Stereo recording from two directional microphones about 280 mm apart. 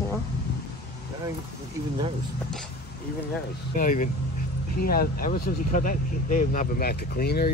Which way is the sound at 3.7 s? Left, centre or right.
Left.